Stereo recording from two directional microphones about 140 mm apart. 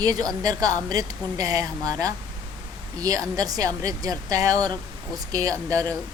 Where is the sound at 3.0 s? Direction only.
25° right (ahead or behind).